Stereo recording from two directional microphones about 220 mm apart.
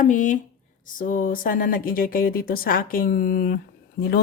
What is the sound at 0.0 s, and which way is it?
Speech, 35° left (ahead or behind).